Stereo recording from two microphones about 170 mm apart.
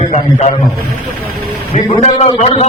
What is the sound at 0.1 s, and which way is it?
Speech, 40° left (ahead or behind).